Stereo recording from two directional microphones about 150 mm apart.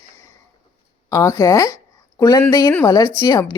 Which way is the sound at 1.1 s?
20° left (ahead or behind).